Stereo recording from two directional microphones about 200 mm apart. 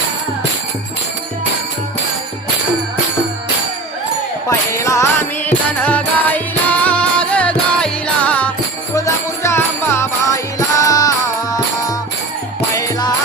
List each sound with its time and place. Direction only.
4.4 s music: 15° left (ahead or behind)
12.7 s music: 20° left (ahead or behind)